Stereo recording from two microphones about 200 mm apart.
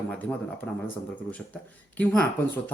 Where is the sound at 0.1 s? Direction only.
10° left (ahead or behind).